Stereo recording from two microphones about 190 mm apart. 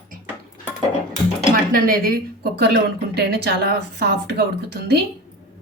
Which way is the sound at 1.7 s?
50° right (ahead or behind).